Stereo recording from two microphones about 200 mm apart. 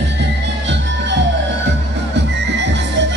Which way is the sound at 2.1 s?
60° right (ahead or behind).